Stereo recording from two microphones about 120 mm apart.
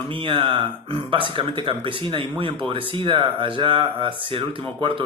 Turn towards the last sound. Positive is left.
turn(degrees=-45)  # may be behind; listen again after turning